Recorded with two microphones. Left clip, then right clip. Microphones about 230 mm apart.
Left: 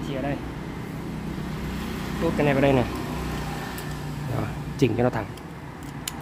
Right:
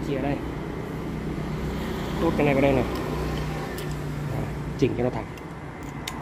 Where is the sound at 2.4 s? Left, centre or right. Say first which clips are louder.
Left 1 dB; left.